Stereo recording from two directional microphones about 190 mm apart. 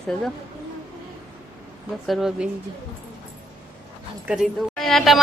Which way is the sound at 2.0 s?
Centre (ahead or behind).